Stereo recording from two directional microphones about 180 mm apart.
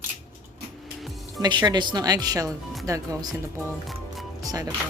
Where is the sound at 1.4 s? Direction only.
25° right (ahead or behind).